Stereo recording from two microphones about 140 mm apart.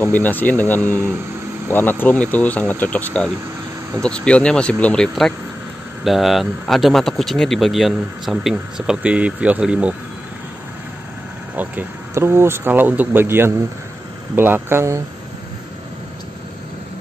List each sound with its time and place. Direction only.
0.0 s speech: 15° left (ahead or behind); by 9.9 s 10° right (ahead or behind)
11.5 s speech: 15° right (ahead or behind)